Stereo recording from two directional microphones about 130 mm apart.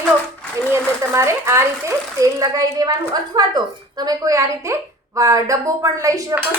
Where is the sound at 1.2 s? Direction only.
20° right (ahead or behind).